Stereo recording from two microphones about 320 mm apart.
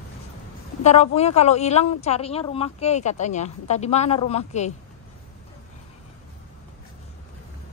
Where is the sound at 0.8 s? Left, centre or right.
Centre.